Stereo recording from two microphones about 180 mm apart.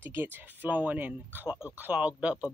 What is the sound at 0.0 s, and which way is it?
Speech, 10° right (ahead or behind).